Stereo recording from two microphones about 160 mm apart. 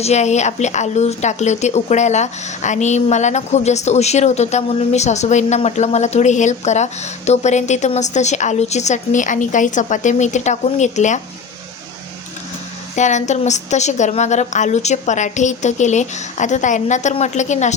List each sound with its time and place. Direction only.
0.0 s speech: 45° left (ahead or behind)
13.0 s speech: 45° left (ahead or behind)